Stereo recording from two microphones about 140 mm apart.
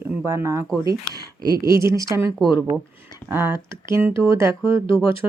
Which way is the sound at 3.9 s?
20° right (ahead or behind).